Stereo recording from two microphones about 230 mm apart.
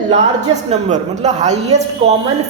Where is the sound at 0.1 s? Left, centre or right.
Right.